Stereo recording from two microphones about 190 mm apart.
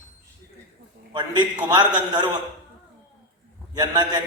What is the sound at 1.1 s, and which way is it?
A man's voice, 25° right (ahead or behind).